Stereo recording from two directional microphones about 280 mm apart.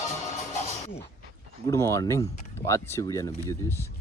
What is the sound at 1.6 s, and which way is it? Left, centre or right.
Speech, centre.